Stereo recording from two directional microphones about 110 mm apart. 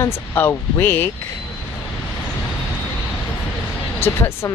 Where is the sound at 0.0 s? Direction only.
25° left (ahead or behind).